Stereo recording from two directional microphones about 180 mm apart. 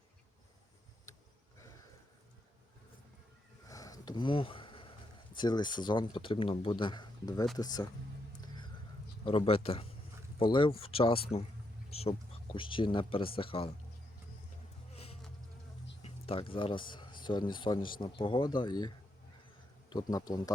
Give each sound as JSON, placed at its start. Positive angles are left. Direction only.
{"t": 3.7, "sound": "a sound", "side_deg": 20}
{"t": 5.3, "sound": "speech", "side_deg": 25}
{"t": 9.2, "sound": "speech", "side_deg": 30}
{"t": 16.0, "sound": "speech", "side_deg": 30}
{"t": 19.9, "sound": "speech", "side_deg": 20}